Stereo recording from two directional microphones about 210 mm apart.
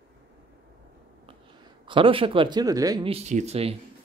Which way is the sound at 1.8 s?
25° right (ahead or behind).